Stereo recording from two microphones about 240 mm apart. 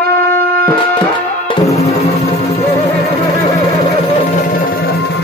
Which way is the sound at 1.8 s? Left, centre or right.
Left.